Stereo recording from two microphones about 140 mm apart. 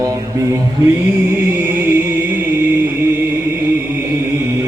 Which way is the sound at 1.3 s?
15° right (ahead or behind).